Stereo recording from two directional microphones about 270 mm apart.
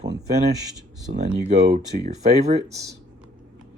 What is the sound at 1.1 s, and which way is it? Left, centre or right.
Speech, right.